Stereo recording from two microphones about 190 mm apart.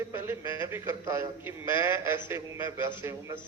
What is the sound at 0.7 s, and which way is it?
A man's voice, 15° right (ahead or behind).